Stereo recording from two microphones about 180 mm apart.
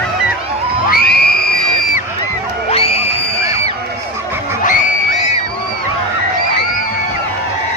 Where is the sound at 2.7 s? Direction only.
30° left (ahead or behind).